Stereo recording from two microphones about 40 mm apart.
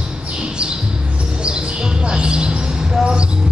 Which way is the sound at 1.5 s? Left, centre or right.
Right.